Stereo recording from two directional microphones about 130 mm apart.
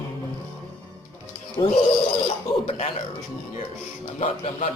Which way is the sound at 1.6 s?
30° left (ahead or behind).